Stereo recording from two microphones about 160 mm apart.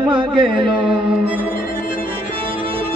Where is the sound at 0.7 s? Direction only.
5° right (ahead or behind).